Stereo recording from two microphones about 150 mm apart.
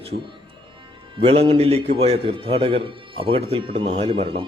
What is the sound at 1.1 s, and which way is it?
A man's voice, 40° right (ahead or behind).